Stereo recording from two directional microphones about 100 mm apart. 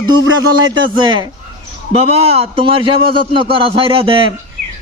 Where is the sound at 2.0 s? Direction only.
80° right.